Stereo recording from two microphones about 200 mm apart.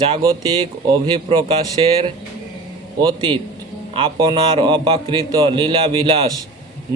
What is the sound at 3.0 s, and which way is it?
A man's voice, 20° right (ahead or behind).